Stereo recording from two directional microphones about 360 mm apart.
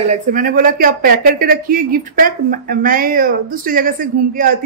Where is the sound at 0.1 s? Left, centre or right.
Right.